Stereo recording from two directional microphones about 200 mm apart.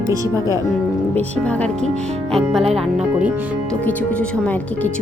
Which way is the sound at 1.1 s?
5° left (ahead or behind).